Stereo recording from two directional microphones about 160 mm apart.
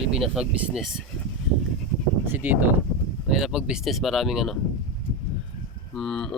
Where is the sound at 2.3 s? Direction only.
10° right (ahead or behind).